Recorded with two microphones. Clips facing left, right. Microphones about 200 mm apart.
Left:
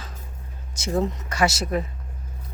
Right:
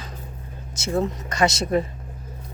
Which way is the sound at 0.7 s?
15° left (ahead or behind).